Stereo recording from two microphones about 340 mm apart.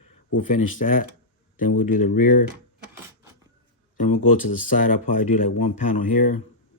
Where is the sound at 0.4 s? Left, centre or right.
Left.